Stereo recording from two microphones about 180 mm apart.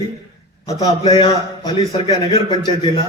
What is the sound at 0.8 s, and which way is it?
A man's voice, 30° left (ahead or behind).